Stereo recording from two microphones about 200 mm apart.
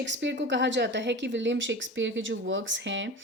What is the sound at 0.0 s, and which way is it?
A woman's voice, 65° right (ahead or behind).